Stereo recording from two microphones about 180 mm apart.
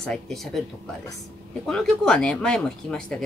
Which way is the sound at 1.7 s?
Centre (ahead or behind).